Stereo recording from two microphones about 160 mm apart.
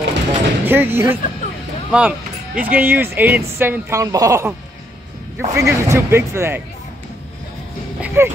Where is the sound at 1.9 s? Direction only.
10° right (ahead or behind).